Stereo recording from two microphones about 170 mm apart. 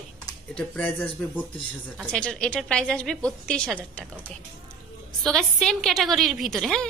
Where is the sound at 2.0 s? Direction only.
5° left (ahead or behind).